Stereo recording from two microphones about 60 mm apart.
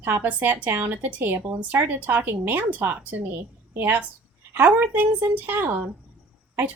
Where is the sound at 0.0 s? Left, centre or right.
Right.